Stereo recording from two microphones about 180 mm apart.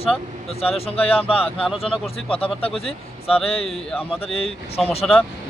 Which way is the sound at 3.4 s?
35° left (ahead or behind).